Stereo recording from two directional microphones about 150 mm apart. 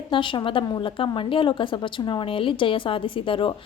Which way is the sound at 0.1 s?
35° left (ahead or behind).